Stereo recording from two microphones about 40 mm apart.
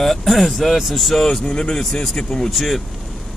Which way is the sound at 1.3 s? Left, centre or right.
Centre.